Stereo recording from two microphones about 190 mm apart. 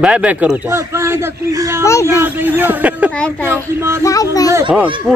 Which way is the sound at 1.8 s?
15° left (ahead or behind).